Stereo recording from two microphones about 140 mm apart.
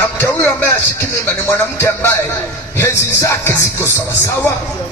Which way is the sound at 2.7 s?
20° left (ahead or behind).